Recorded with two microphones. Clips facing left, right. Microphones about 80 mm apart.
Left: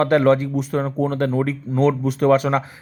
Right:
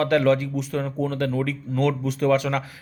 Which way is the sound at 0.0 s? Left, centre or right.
Left.